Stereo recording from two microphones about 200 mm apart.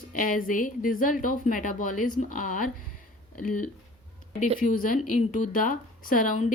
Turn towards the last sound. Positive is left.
turn(degrees=40)  # may be behind; listen again after turning